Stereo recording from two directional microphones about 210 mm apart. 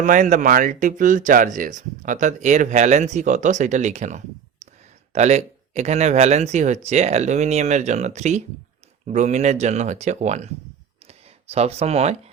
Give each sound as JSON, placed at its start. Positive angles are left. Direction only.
{"t": 0.0, "sound": "speech", "side_deg": -40}
{"t": 4.6, "sound": "clicking", "side_deg": -35}
{"t": 5.1, "sound": "speech", "side_deg": -30}
{"t": 11.0, "sound": "a sound", "side_deg": -30}